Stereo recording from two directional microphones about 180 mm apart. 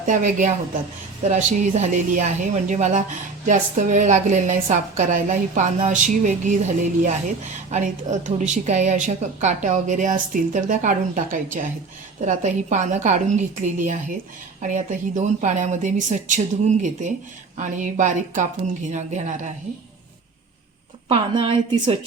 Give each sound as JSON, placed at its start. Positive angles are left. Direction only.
{"t": 0.0, "sound": "a woman's voice", "side_deg": -45}
{"t": 7.7, "sound": "a woman's voice", "side_deg": -40}
{"t": 21.1, "sound": "a woman's voice", "side_deg": -30}